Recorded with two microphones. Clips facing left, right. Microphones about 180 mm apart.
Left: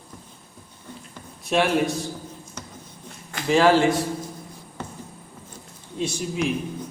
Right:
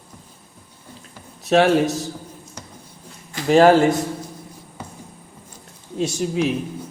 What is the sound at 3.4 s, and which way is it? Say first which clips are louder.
Speech: right 5 dB; 45° right (ahead or behind).